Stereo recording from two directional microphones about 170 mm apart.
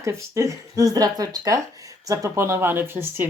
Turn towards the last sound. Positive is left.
turn(degrees=-10)  # may be behind; listen again after turning